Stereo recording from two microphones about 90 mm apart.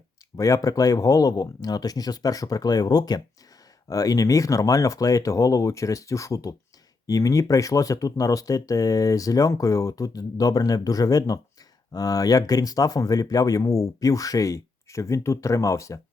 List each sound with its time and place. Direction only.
0.3 s speech: 40° left (ahead or behind)